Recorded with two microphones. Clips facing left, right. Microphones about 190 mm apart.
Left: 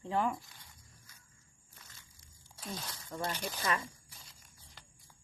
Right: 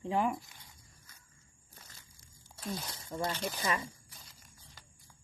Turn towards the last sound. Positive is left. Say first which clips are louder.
# right 1 dB
turn(degrees=0)  # may be behind; listen again after turning